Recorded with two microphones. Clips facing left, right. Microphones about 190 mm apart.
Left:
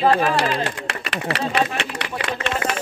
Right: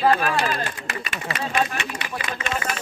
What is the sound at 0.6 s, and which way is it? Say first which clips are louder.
Speech: left 4 dB; 70° left (ahead or behind).